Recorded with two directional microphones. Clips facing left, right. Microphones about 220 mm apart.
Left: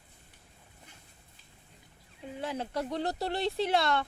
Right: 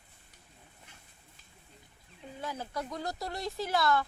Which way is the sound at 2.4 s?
30° left (ahead or behind).